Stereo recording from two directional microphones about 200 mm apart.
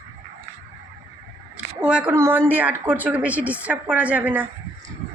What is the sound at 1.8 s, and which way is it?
A woman's voice, 5° right (ahead or behind).